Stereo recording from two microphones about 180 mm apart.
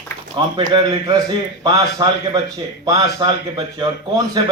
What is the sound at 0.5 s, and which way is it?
A man's voice, 25° right (ahead or behind).